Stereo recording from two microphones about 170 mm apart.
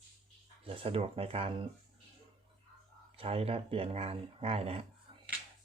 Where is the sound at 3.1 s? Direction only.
35° right (ahead or behind).